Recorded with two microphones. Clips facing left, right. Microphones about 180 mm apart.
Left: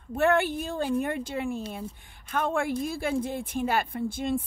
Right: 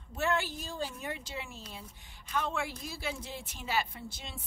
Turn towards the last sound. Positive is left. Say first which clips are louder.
# left 17 dB
turn(degrees=50)  # may be behind; listen again after turning